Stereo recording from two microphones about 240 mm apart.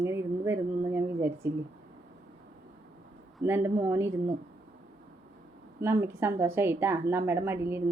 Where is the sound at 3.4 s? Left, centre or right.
Centre.